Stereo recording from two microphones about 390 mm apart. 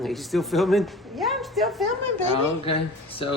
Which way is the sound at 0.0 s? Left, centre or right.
Centre.